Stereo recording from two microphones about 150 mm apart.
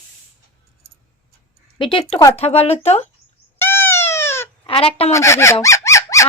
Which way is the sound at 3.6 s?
15° left (ahead or behind).